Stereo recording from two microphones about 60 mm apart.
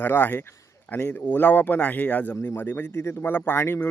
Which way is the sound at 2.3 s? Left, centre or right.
Left.